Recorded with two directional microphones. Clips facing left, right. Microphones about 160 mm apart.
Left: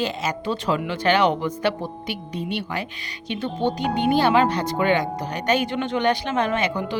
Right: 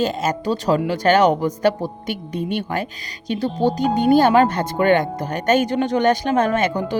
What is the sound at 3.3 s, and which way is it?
Speech, 35° right (ahead or behind).